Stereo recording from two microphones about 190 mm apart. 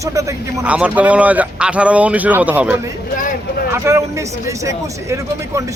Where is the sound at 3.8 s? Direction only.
15° right (ahead or behind).